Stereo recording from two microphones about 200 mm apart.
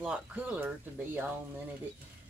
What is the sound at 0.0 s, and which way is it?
Speech, 5° right (ahead or behind).